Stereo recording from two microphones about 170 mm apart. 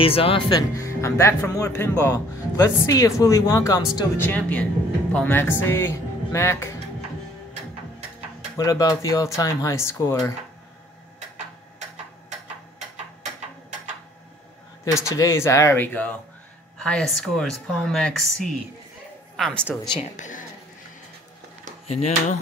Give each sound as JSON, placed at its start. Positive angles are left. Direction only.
{"t": 0.0, "sound": "speech", "side_deg": 35}
{"t": 8.5, "sound": "speech", "side_deg": 20}
{"t": 15.0, "sound": "a woman's voice", "side_deg": 15}
{"t": 19.9, "sound": "speech", "side_deg": 40}
{"t": 21.8, "sound": "speech", "side_deg": 40}